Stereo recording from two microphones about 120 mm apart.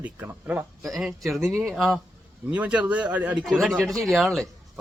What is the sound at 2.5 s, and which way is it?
Speech, 10° right (ahead or behind).